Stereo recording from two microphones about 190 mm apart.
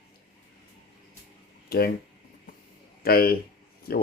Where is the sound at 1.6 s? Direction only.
55° left (ahead or behind).